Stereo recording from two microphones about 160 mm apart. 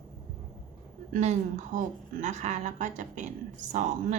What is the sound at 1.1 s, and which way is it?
A woman's voice, 50° right (ahead or behind).